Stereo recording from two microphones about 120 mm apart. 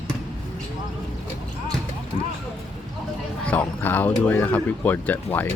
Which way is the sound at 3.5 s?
15° left (ahead or behind).